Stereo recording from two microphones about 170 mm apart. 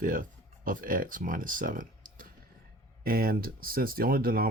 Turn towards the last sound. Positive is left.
turn(degrees=-55)  # may be behind; listen again after turning